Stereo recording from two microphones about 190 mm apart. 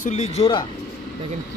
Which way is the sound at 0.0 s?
35° left (ahead or behind).